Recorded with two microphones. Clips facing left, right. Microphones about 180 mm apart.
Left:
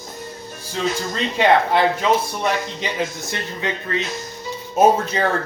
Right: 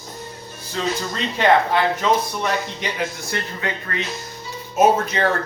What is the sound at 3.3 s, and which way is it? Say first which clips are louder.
Speech: even; 20° left (ahead or behind).